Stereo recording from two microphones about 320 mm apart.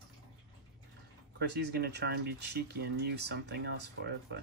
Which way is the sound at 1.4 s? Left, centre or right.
Right.